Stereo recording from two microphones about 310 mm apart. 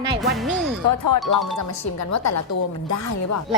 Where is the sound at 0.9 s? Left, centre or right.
Left.